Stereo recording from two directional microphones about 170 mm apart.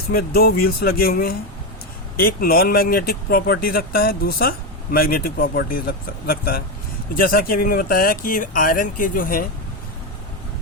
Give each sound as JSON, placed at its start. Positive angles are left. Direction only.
{"t": 0.1, "sound": "speech", "side_deg": 65}